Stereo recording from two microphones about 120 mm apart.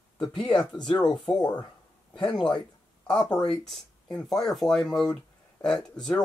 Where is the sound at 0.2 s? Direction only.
45° left (ahead or behind).